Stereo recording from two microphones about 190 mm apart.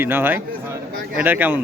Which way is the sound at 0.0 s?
10° right (ahead or behind).